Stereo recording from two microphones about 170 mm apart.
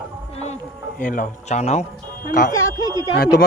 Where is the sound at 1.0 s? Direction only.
55° left (ahead or behind).